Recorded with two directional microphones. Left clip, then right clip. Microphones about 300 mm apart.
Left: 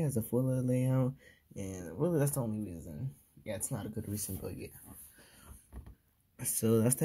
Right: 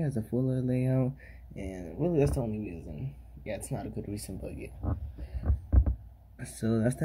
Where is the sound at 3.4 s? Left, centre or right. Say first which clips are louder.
Right 3 dB; left.